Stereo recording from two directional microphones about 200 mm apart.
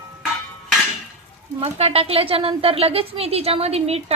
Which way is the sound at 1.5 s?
30° right (ahead or behind).